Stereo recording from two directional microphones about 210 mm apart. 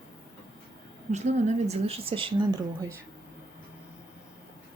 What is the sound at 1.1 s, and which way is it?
Speech, 30° right (ahead or behind).